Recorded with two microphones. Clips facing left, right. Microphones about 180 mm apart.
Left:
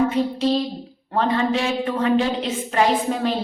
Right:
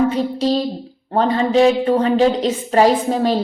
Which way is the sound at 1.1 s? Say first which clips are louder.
Right 5 dB; 35° right (ahead or behind).